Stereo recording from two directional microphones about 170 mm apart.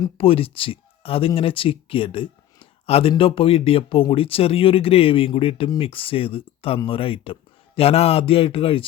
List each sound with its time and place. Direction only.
0.0 s speech: 35° left (ahead or behind)